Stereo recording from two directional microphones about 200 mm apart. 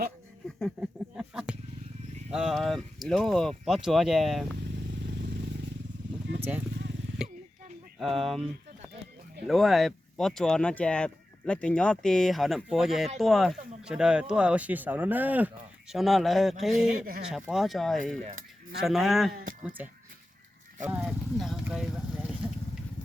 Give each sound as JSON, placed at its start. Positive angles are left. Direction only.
{"t": 0.6, "sound": "a sound", "side_deg": -5}
{"t": 2.3, "sound": "speech", "side_deg": 0}
{"t": 4.9, "sound": "vehicle", "side_deg": -60}
{"t": 7.9, "sound": "speech", "side_deg": 0}
{"t": 9.5, "sound": "speech", "side_deg": 0}
{"t": 16.7, "sound": "speech", "side_deg": -45}
{"t": 17.2, "sound": "speech", "side_deg": 0}
{"t": 18.3, "sound": "a sound", "side_deg": -40}
{"t": 18.8, "sound": "speech", "side_deg": 0}
{"t": 20.8, "sound": "a sound", "side_deg": -5}